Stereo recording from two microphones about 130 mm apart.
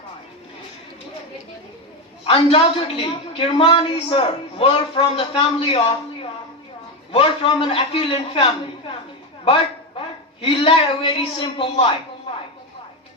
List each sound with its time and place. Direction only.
2.2 s a woman's voice: 45° left (ahead or behind)
7.1 s a woman's voice: 45° left (ahead or behind)
10.4 s a woman's voice: 40° left (ahead or behind)